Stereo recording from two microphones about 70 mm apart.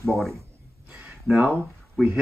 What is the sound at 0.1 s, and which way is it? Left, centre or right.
Speech, centre.